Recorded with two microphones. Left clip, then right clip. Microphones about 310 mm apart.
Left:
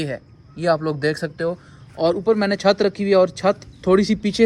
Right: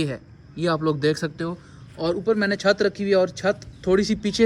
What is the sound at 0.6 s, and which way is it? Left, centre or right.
Speech, left.